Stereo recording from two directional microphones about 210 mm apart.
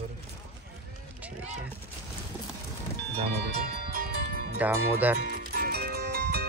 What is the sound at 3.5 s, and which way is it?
Music, 40° right (ahead or behind).